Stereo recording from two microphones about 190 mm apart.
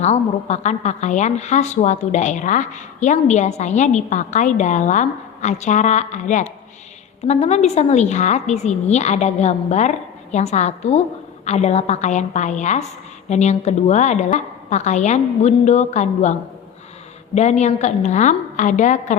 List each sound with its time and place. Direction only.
0.0 s a woman's voice: 35° left (ahead or behind)
17.3 s a woman's voice: 35° left (ahead or behind)